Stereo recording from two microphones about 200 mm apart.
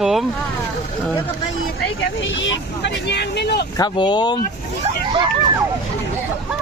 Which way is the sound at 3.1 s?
55° left (ahead or behind).